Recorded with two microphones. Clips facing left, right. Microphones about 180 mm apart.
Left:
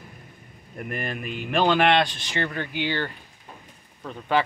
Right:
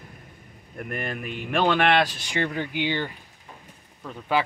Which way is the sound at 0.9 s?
Centre (ahead or behind).